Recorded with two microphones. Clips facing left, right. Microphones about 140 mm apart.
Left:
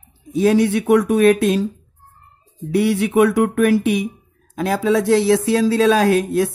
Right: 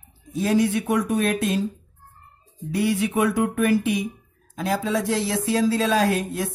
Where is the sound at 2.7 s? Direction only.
70° left (ahead or behind).